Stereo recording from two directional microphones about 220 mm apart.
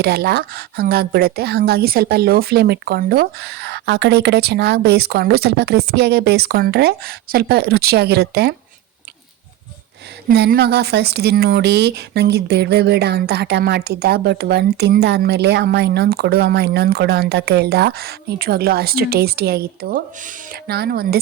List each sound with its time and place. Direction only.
0.0 s speech: 45° right (ahead or behind)
10.2 s speech: 45° right (ahead or behind)